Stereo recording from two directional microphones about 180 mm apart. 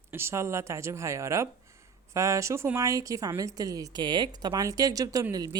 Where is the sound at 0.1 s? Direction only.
15° right (ahead or behind).